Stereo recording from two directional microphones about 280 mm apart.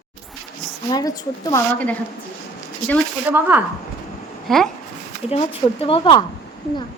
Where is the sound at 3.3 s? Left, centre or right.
Centre.